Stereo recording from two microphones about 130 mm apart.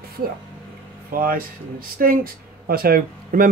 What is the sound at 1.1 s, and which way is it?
Speech, 90° right.